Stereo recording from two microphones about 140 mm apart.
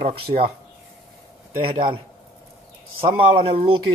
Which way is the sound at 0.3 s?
50° right (ahead or behind).